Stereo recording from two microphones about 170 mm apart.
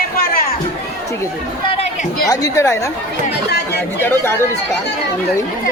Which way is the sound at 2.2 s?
20° left (ahead or behind).